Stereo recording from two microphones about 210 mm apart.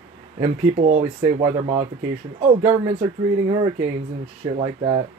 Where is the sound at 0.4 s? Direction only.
35° right (ahead or behind).